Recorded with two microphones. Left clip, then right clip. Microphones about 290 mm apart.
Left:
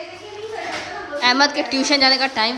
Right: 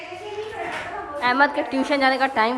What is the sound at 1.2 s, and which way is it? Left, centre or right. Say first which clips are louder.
A woman's voice: left 3 dB; centre.